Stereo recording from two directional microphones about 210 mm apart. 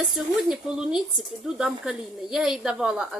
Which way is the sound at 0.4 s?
5° right (ahead or behind).